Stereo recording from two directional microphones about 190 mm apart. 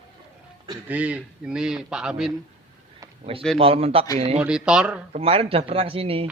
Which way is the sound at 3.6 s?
30° right (ahead or behind).